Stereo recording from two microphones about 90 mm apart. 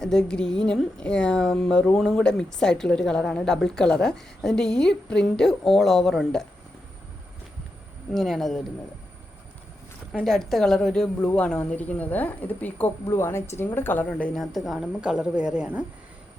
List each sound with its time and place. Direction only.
0.0 s a woman's voice: 5° left (ahead or behind)
8.1 s a woman's voice: centre (ahead or behind)
10.2 s a woman's voice: 5° left (ahead or behind)
14.3 s a woman's voice: centre (ahead or behind)